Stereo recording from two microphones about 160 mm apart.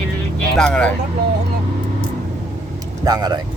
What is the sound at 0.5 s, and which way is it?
Vehicle, 5° left (ahead or behind).